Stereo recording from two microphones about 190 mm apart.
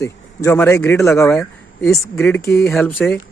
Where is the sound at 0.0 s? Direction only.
15° left (ahead or behind).